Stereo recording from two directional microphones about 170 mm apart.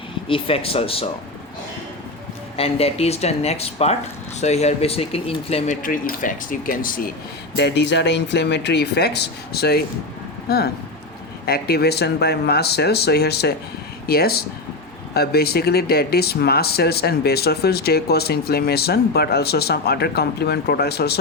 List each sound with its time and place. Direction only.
0.3 s speech: 30° left (ahead or behind)
2.6 s speech: 35° left (ahead or behind)
5.8 s speech: 55° left (ahead or behind)
7.5 s speech: 80° left